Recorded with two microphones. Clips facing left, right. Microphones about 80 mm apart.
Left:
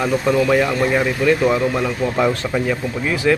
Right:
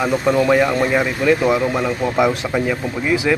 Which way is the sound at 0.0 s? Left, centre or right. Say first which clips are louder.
Right 1 dB; centre.